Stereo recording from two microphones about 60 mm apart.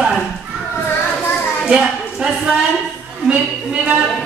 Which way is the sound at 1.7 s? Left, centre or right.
Centre.